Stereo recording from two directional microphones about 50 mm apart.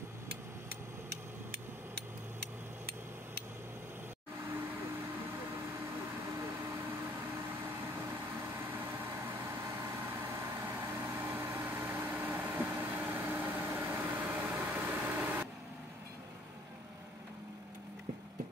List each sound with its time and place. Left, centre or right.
8.1 s vehicle: right
9.8 s vehicle: right